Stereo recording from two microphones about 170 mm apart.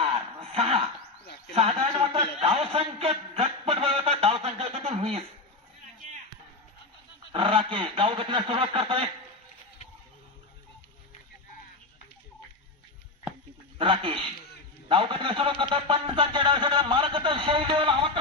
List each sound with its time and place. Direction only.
0.0 s chuckle: 30° right (ahead or behind)
2.1 s a sound: 30° right (ahead or behind)
7.3 s a man's voice: 30° right (ahead or behind)
13.7 s a man's voice: 30° right (ahead or behind)